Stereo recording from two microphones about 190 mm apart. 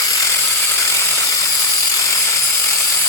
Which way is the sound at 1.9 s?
15° left (ahead or behind).